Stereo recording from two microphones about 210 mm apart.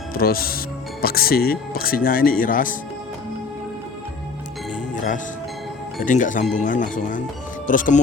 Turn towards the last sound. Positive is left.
turn(degrees=40)  # may be behind; listen again after turning